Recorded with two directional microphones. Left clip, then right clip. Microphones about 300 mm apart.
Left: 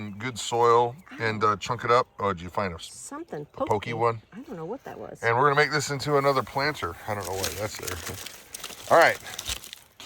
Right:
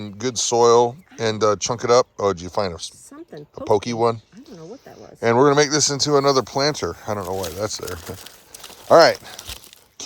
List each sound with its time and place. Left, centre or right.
0.0 s speech: centre
5.2 s speech: centre